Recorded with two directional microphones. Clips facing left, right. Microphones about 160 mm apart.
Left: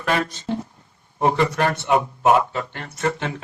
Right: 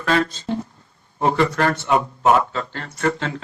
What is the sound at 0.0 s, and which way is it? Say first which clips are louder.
Speech: right 2 dB; 20° left (ahead or behind).